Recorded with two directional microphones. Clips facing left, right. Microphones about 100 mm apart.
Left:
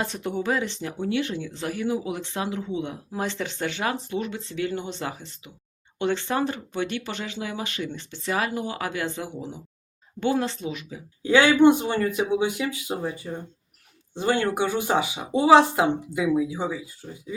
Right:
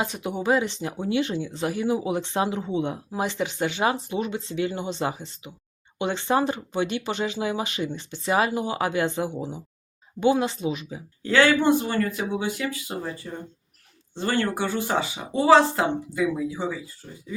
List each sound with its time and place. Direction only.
0.0 s speech: 10° right (ahead or behind); by 3.0 s 25° right (ahead or behind)
3.1 s speech: 15° right (ahead or behind)
11.2 s a woman's voice: 15° left (ahead or behind)